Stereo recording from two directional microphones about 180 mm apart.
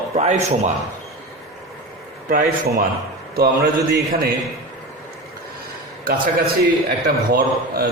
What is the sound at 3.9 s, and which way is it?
Speech, 55° right (ahead or behind).